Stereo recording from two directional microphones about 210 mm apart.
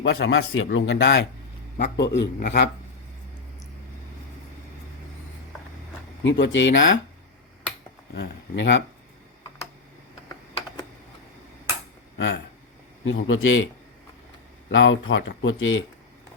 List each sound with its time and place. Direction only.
0.0 s a man's voice: 65° left (ahead or behind); by 2.6 s 50° left (ahead or behind)
6.2 s speech: 60° left (ahead or behind)
8.1 s speech: 55° left (ahead or behind)
12.1 s a sound: 55° left (ahead or behind)
13.1 s speech: 65° left (ahead or behind)
14.7 s speech: 65° left (ahead or behind)